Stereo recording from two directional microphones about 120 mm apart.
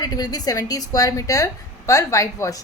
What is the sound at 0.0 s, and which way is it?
A woman's voice, 35° left (ahead or behind).